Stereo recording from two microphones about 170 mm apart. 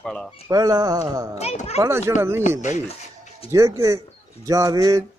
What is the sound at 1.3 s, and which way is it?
Speech, 40° left (ahead or behind).